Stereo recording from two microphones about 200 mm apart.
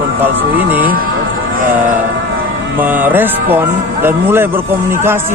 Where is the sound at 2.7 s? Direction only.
10° right (ahead or behind).